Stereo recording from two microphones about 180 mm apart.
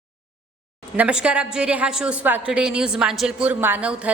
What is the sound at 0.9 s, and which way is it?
A woman's voice, 5° right (ahead or behind).